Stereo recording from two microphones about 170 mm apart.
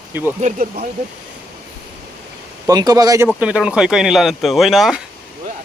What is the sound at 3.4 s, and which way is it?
Speech, 5° right (ahead or behind).